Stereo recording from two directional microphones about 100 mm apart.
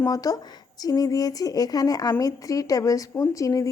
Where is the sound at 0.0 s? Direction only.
35° left (ahead or behind).